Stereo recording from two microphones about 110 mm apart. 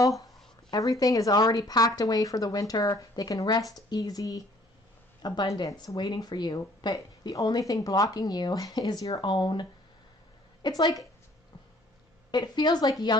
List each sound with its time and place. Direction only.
0.7 s speech: 35° left (ahead or behind)
12.3 s speech: 40° left (ahead or behind)